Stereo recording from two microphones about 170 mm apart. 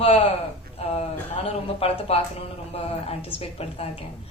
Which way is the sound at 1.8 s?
35° left (ahead or behind).